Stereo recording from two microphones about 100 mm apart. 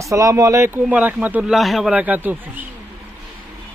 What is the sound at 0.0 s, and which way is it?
Speech, 35° right (ahead or behind).